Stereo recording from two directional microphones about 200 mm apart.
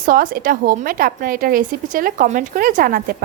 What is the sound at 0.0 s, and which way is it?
A woman's voice, 45° right (ahead or behind).